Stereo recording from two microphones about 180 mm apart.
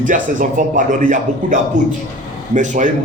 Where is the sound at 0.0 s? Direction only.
45° right (ahead or behind).